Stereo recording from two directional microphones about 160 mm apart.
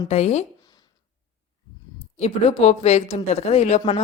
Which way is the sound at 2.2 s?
40° left (ahead or behind).